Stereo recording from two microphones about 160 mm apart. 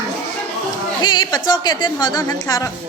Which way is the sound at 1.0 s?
25° left (ahead or behind).